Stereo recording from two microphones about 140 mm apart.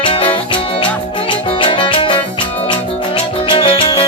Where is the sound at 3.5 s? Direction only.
40° left (ahead or behind).